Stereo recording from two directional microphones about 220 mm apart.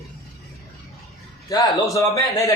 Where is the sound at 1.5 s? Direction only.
15° left (ahead or behind).